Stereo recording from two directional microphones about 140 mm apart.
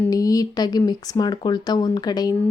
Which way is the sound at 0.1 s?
25° left (ahead or behind).